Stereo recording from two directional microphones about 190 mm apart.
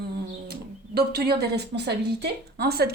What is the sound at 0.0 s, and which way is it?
Speech, 55° right (ahead or behind).